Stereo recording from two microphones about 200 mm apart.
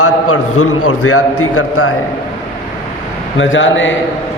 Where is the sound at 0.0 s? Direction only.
90° left.